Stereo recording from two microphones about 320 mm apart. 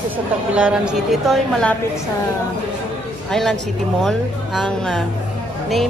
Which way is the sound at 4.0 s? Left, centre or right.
Centre.